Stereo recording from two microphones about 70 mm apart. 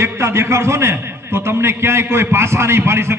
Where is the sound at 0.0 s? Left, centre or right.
Right.